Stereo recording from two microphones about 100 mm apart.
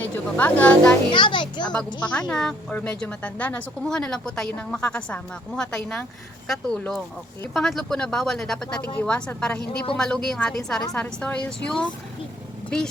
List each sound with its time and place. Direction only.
0.0 s speech: 15° left (ahead or behind)
1.1 s a child's voice: 55° left (ahead or behind)
2.0 s a woman's voice: 10° left (ahead or behind)